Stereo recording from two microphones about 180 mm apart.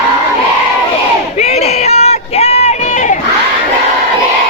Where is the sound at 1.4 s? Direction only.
35° left (ahead or behind).